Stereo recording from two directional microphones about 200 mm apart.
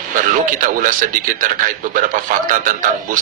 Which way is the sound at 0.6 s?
40° right (ahead or behind).